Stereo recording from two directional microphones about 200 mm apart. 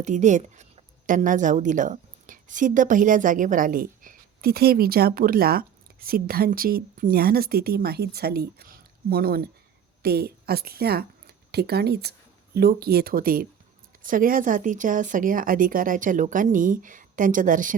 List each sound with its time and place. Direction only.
0.0 s a woman's voice: 35° right (ahead or behind)